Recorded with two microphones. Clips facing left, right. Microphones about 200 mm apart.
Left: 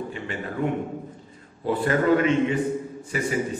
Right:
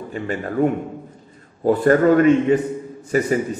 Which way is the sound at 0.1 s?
45° right (ahead or behind).